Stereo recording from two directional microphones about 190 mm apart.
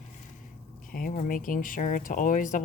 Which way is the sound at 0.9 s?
45° left (ahead or behind).